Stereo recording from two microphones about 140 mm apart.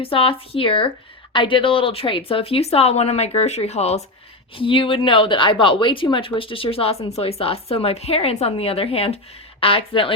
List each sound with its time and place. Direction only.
0.0 s a woman's voice: 40° left (ahead or behind)
4.5 s speech: 40° left (ahead or behind)